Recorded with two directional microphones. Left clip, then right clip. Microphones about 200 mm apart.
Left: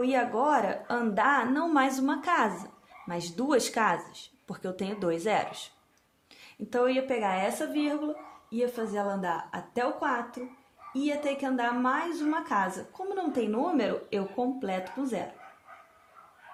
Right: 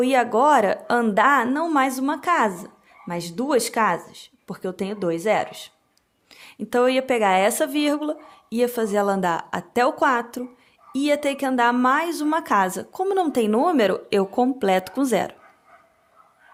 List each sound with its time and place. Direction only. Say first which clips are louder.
0.0 s a woman's voice: right 9 dB; 40° right (ahead or behind)